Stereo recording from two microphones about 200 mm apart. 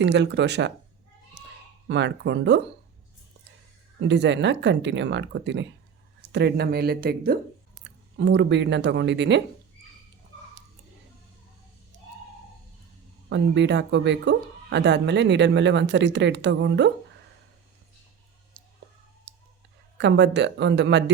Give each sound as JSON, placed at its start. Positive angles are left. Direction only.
{"t": 0.0, "sound": "speech", "side_deg": -60}
{"t": 1.4, "sound": "a sound", "side_deg": -60}
{"t": 1.9, "sound": "speech", "side_deg": -60}
{"t": 4.0, "sound": "a woman's voice", "side_deg": -60}
{"t": 8.1, "sound": "speech", "side_deg": -60}
{"t": 13.3, "sound": "speech", "side_deg": -60}
{"t": 20.0, "sound": "speech", "side_deg": -60}